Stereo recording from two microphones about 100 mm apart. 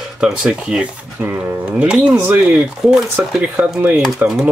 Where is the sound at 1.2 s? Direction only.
20° right (ahead or behind).